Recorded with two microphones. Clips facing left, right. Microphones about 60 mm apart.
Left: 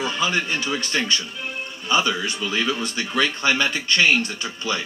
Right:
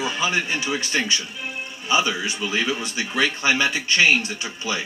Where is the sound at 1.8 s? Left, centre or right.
Centre.